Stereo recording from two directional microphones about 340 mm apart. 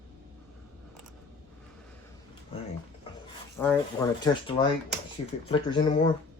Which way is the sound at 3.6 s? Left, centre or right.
Centre.